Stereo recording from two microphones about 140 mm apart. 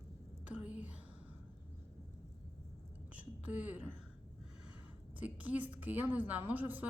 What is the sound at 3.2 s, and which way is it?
Speech, 10° right (ahead or behind).